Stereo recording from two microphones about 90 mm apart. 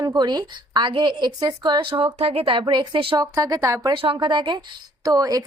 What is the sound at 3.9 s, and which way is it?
Speech, 75° right (ahead or behind).